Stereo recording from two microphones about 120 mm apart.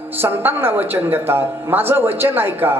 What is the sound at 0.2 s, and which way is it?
A man's voice, 15° right (ahead or behind).